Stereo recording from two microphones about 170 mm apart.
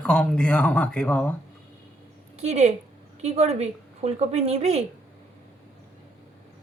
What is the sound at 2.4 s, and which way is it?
A woman's voice, 40° right (ahead or behind).